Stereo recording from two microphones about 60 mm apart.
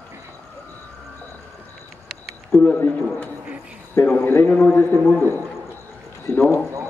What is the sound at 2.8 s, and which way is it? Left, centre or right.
Speech, left.